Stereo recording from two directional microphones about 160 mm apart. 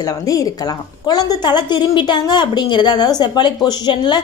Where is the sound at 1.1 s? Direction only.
25° left (ahead or behind).